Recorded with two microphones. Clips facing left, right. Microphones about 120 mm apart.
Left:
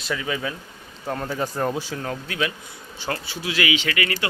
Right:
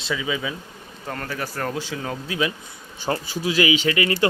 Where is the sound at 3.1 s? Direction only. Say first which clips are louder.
Right 4 dB; 20° right (ahead or behind).